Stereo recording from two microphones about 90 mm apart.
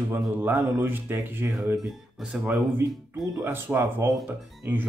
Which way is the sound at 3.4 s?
25° right (ahead or behind).